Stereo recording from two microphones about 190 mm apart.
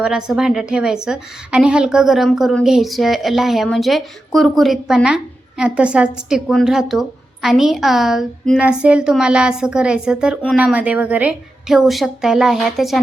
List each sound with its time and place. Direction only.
0.0 s a woman's voice: 5° right (ahead or behind)